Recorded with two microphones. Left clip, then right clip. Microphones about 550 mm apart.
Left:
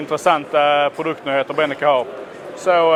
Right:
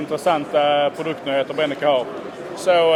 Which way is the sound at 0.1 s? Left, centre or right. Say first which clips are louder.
Left 3 dB; left.